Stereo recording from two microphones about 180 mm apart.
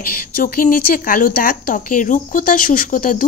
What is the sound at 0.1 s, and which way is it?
Speech, 50° left (ahead or behind).